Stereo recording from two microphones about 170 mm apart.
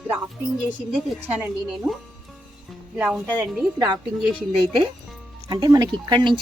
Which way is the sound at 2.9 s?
5° right (ahead or behind).